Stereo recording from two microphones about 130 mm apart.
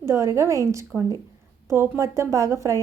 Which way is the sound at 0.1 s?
25° right (ahead or behind).